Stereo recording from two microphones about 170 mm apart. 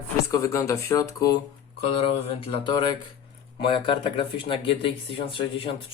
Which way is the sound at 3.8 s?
30° left (ahead or behind).